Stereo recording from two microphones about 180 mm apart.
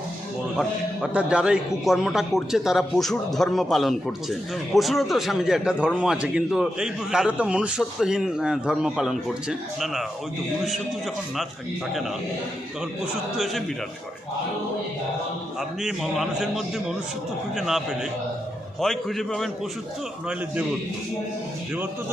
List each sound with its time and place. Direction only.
1.0 s a man's voice: 5° right (ahead or behind)
13.3 s a man's voice: centre (ahead or behind)
15.8 s a man's voice: centre (ahead or behind)